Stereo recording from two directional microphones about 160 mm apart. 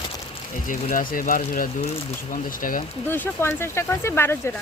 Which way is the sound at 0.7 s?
55° left (ahead or behind).